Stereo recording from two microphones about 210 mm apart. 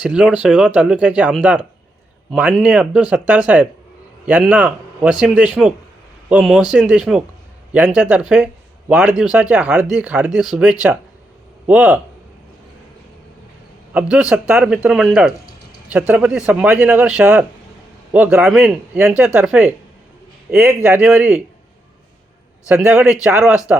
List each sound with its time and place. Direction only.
0.0 s speech: 5° right (ahead or behind)
13.9 s speech: 5° right (ahead or behind)
22.7 s speech: 10° right (ahead or behind)